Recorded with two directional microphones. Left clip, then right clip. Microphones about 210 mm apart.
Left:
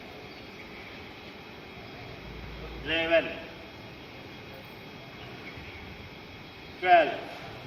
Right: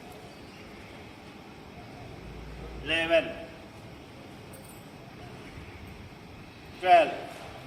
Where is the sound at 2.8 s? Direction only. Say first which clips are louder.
Even; 15° right (ahead or behind).